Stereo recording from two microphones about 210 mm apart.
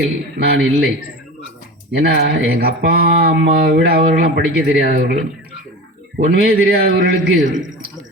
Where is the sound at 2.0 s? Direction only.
50° right (ahead or behind).